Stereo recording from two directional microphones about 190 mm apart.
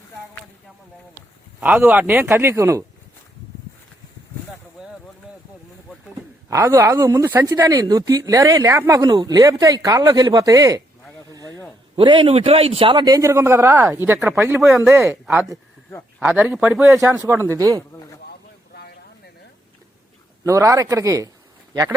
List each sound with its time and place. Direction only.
1.6 s a man's voice: 10° right (ahead or behind)
6.5 s a man's voice: 15° right (ahead or behind)
11.3 s a sound: 20° right (ahead or behind)
11.9 s a man's voice: 25° right (ahead or behind)
18.3 s vehicle: 55° left (ahead or behind)
20.4 s a man's voice: 15° right (ahead or behind)